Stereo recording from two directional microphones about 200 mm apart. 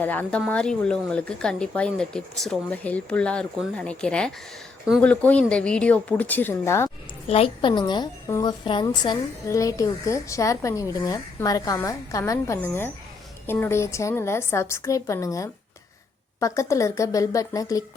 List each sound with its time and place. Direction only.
0.0 s a woman's voice: 10° left (ahead or behind)
7.3 s a woman's voice: 30° left (ahead or behind)